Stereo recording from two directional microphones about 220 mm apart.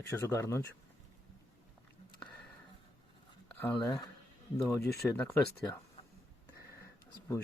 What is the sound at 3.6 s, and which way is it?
Speech, 10° left (ahead or behind).